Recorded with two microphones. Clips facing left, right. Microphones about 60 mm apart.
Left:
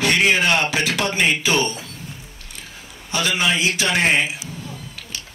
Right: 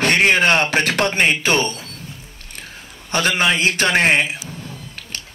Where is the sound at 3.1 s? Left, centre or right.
Right.